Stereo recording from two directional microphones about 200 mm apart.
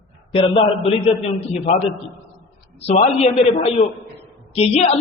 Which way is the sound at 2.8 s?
30° left (ahead or behind).